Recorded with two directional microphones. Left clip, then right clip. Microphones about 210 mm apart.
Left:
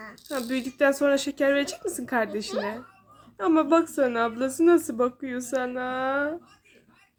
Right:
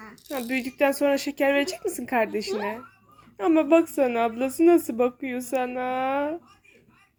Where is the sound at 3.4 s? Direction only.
5° right (ahead or behind).